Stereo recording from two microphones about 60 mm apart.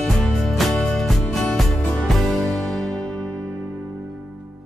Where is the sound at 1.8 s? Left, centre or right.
Left.